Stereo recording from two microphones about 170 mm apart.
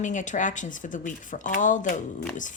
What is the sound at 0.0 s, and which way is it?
Speech, 45° left (ahead or behind).